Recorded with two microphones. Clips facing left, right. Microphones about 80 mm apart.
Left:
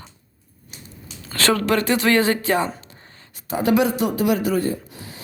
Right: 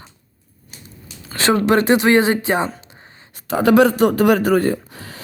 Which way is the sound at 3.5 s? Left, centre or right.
Right.